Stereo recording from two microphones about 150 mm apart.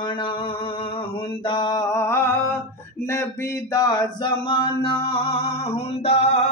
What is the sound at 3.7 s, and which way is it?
Music, 25° left (ahead or behind).